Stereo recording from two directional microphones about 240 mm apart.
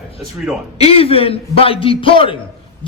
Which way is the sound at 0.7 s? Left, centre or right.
Left.